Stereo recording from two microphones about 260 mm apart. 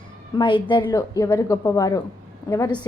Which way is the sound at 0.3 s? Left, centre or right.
Centre.